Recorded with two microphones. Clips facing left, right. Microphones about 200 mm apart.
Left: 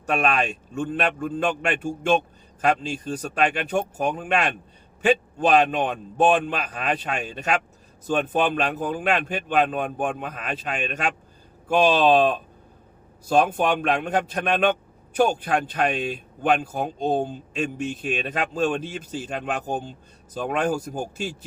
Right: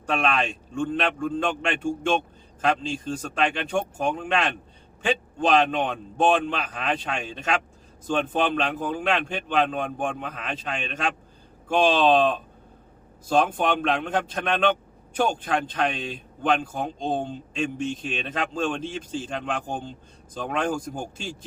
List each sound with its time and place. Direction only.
0.0 s a man's voice: 10° left (ahead or behind)